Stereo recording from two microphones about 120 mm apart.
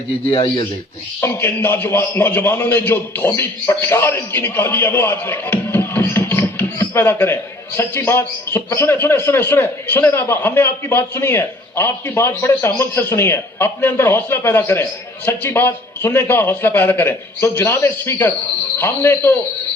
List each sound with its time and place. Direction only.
1.2 s a man's voice: 15° left (ahead or behind)